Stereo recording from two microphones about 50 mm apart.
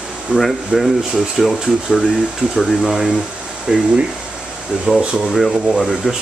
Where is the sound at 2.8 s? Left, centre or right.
Centre.